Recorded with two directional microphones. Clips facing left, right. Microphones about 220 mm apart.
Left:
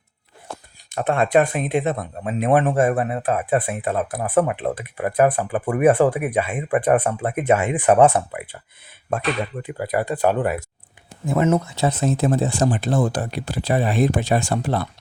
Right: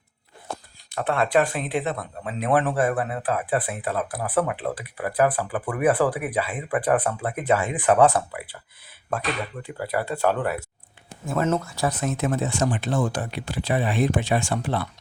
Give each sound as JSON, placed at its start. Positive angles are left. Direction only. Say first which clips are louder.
{"t": 0.9, "sound": "speech", "louder": "left 4 dB", "side_deg": 20}
{"t": 9.6, "sound": "speech", "louder": "left 3 dB", "side_deg": 15}
{"t": 11.7, "sound": "speech", "louder": "left 5 dB", "side_deg": 25}